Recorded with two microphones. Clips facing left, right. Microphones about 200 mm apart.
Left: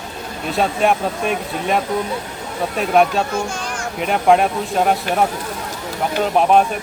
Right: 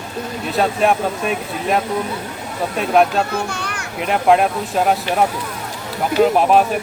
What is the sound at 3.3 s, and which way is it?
Children playing, 65° right (ahead or behind).